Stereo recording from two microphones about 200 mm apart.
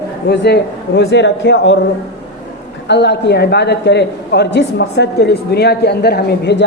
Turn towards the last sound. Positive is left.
turn(degrees=55)  # may be behind; listen again after turning